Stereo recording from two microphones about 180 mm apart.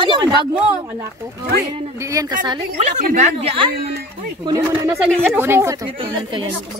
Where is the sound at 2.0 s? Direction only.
20° right (ahead or behind).